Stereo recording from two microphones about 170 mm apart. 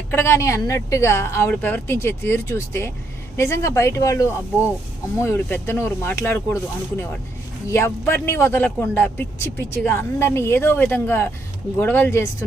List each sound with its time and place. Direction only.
0.1 s a man's voice: 15° left (ahead or behind)